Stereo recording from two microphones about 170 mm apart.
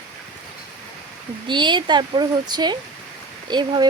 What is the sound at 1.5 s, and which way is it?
Speech, 30° right (ahead or behind).